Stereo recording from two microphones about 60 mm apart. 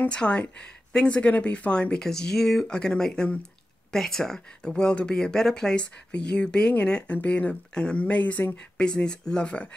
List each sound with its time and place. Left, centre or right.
0.1 s speech: centre
2.0 s speech: centre; by 8.5 s left
8.5 s speech: centre